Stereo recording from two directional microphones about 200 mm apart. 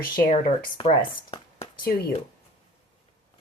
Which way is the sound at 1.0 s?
25° left (ahead or behind).